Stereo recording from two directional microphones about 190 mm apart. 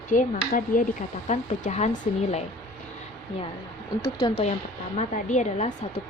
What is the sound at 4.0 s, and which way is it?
Speech, 25° left (ahead or behind).